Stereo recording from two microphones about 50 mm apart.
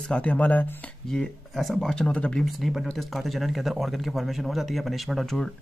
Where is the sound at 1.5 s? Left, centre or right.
Centre.